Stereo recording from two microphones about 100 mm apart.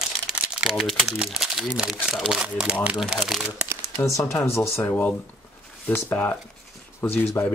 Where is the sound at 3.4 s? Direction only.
25° right (ahead or behind).